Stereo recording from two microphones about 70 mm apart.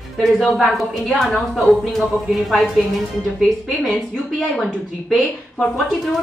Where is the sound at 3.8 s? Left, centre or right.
Centre.